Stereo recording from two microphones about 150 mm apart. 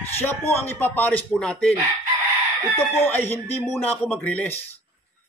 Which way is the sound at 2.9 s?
15° left (ahead or behind).